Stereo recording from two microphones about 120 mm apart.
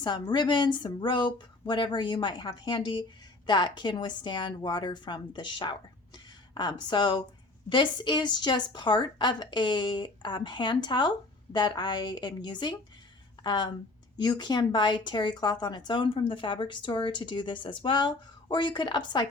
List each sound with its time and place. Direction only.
0.0 s a woman's voice: 35° left (ahead or behind)